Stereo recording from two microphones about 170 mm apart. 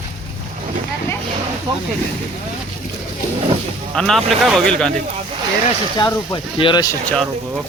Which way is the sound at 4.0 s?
Centre (ahead or behind).